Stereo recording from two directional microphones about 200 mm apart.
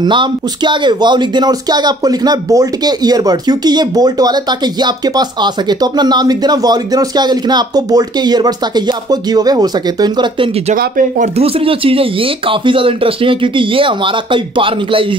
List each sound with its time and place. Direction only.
0.0 s speech: 20° right (ahead or behind)
10.7 s speech: 40° right (ahead or behind)